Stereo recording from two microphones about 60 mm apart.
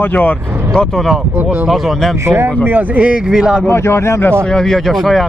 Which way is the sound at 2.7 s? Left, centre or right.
Right.